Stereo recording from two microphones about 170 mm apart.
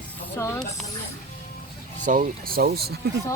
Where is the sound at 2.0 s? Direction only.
55° right (ahead or behind); by 2.9 s 70° right (ahead or behind).